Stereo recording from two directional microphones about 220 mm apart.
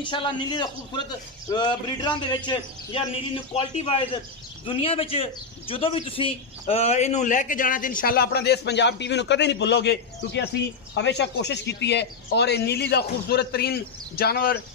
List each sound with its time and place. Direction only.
0.0 s a man's voice: 20° left (ahead or behind); by 14.6 s 45° left (ahead or behind)